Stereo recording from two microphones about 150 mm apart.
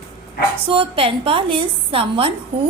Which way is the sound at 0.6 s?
35° right (ahead or behind).